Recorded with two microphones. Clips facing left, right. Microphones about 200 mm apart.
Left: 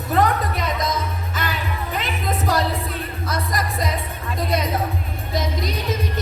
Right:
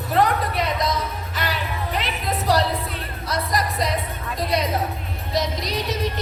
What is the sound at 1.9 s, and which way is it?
Music, 50° left (ahead or behind).